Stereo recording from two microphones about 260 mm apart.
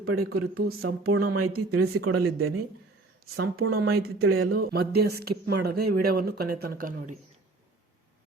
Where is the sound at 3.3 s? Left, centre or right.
Right.